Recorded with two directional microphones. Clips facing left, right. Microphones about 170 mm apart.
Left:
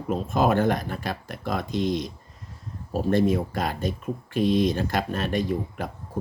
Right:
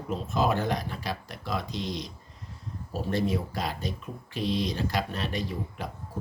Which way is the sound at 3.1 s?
50° left (ahead or behind).